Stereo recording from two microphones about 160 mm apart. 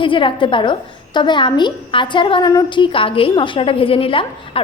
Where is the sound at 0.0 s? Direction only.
30° left (ahead or behind).